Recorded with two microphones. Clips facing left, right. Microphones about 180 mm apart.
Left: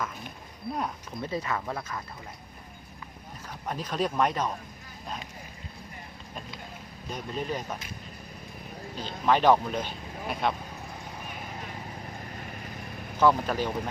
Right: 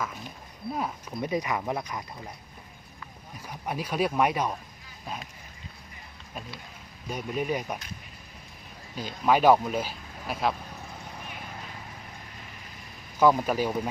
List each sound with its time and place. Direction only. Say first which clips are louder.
1.2 s speech: right 3 dB; 15° right (ahead or behind)
3.5 s speech: right 2 dB; 10° right (ahead or behind)
5.0 s a sound: right 1 dB; 5° right (ahead or behind)
7.1 s speech: right 3 dB; 10° right (ahead or behind)
9.0 s speech: right 1 dB; 10° right (ahead or behind)
13.1 s speech: right 2 dB; 10° right (ahead or behind)